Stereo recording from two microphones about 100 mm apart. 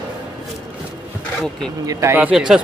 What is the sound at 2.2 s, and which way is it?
Speech, 5° right (ahead or behind).